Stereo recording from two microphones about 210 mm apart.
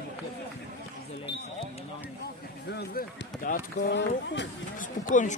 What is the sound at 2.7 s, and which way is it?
Run, 45° left (ahead or behind).